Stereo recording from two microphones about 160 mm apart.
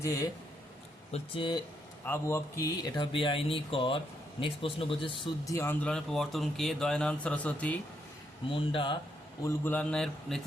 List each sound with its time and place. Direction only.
0.0 s speech: 20° left (ahead or behind)
2.0 s speech: 15° left (ahead or behind); by 5.3 s 30° left (ahead or behind)
5.5 s speech: 15° left (ahead or behind)
8.4 s speech: 35° left (ahead or behind)
9.4 s speech: 10° left (ahead or behind)